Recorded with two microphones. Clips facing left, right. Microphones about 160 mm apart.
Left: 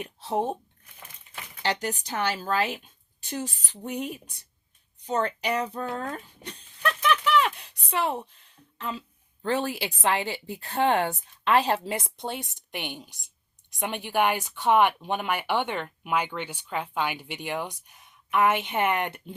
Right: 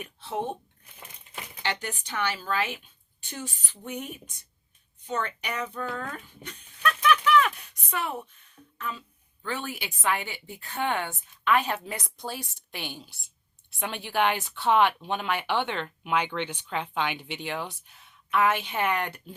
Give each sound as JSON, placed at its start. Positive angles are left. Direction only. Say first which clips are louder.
{"t": 0.0, "sound": "a woman's voice", "louder": "left 4 dB", "side_deg": 40}
{"t": 1.6, "sound": "a woman's voice", "louder": "left 4 dB", "side_deg": 35}